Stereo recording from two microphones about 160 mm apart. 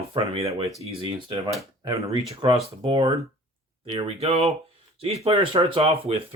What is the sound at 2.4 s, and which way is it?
Speech, 30° right (ahead or behind).